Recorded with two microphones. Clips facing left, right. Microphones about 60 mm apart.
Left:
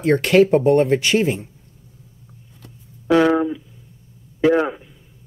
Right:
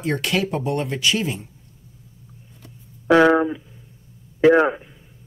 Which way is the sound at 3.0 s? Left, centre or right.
Right.